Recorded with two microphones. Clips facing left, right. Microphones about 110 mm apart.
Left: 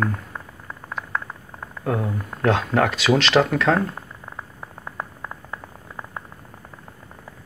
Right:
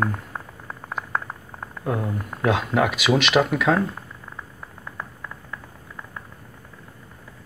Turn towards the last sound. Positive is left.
turn(degrees=25)  # may be behind; listen again after turning